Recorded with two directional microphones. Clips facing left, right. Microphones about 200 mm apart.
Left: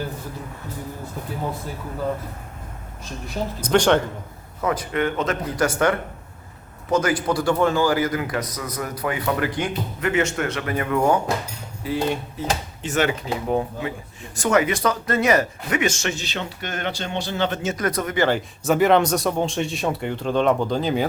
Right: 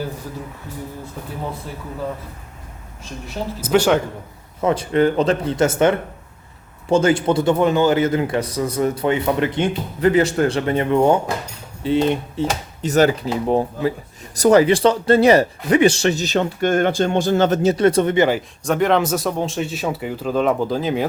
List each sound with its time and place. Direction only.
3.6 s speech: 5° right (ahead or behind)
4.6 s a man's voice: 25° right (ahead or behind)
12.8 s speech: 40° right (ahead or behind)
18.3 s speech: centre (ahead or behind)